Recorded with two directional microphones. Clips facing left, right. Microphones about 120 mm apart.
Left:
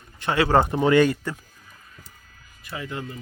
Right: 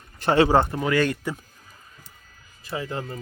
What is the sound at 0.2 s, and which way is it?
Speech, 30° right (ahead or behind).